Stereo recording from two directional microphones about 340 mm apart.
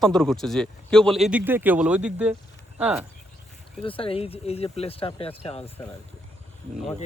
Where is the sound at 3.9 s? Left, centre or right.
Centre.